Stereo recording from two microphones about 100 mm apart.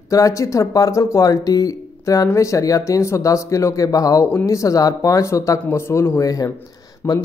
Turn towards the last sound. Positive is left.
turn(degrees=25)  # may be behind; listen again after turning